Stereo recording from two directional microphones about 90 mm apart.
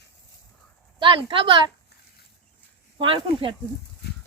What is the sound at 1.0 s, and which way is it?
Speech, 60° right (ahead or behind).